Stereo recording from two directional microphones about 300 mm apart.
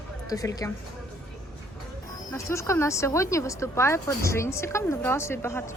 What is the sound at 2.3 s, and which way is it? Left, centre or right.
Speech, centre.